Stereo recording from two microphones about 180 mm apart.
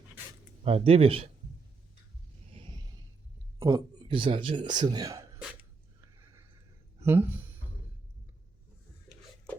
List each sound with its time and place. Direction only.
0.6 s speech: 30° right (ahead or behind)
3.6 s a man's voice: 20° right (ahead or behind)
7.0 s speech: 10° right (ahead or behind)